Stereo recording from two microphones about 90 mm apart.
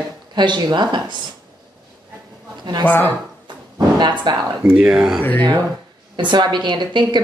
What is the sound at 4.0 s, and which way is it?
Speech, 55° right (ahead or behind).